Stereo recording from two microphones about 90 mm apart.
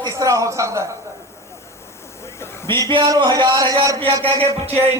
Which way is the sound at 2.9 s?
65° right (ahead or behind).